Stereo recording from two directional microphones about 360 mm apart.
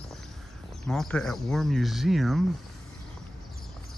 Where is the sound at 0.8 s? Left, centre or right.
Centre.